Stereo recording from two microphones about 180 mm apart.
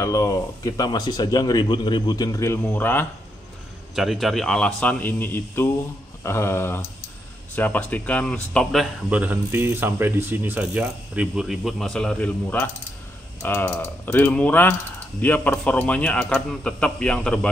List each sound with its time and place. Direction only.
0.0 s speech: 20° left (ahead or behind)
3.9 s speech: centre (ahead or behind)
9.1 s speech: 10° right (ahead or behind)